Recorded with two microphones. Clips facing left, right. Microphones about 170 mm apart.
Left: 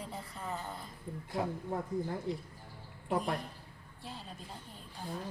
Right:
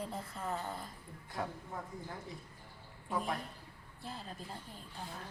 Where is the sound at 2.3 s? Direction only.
65° left (ahead or behind).